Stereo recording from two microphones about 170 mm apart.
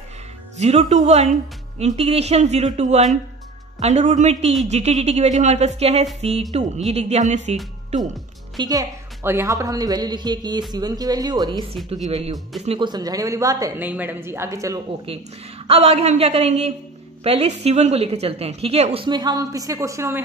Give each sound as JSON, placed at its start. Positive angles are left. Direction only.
{"t": 0.6, "sound": "a woman's voice", "side_deg": -40}
{"t": 8.5, "sound": "a woman's voice", "side_deg": -20}
{"t": 12.1, "sound": "a woman's voice", "side_deg": -35}
{"t": 15.6, "sound": "a woman's voice", "side_deg": -35}
{"t": 19.0, "sound": "a woman's voice", "side_deg": -25}